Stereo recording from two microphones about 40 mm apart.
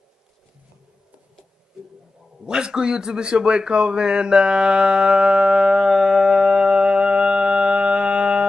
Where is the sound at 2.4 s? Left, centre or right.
Centre.